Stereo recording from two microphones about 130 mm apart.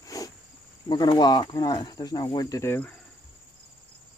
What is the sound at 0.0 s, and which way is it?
Cricket, 30° left (ahead or behind).